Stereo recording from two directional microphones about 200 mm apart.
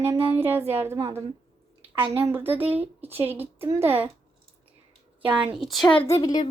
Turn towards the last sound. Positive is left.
turn(degrees=20)  # may be behind; listen again after turning